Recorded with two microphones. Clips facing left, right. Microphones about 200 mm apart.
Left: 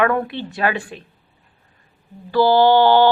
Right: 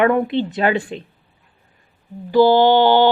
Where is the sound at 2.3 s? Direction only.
20° right (ahead or behind).